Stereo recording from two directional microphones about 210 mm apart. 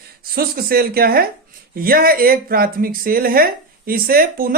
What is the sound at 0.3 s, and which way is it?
Speech, 45° right (ahead or behind).